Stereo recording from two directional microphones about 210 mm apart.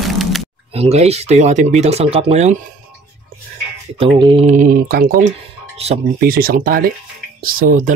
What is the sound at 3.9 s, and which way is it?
Speech, 25° right (ahead or behind).